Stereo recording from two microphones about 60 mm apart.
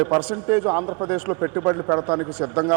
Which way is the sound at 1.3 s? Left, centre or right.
Right.